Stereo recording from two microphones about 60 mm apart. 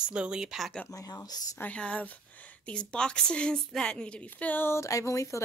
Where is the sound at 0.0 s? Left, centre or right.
Centre.